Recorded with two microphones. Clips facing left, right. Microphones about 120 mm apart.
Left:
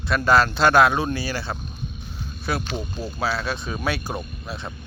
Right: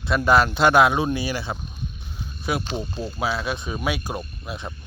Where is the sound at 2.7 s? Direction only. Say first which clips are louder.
Right 1 dB; 25° right (ahead or behind).